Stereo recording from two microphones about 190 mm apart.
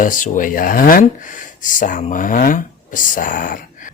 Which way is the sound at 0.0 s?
45° left (ahead or behind).